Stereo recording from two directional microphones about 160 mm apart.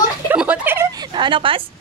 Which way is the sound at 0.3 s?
10° right (ahead or behind).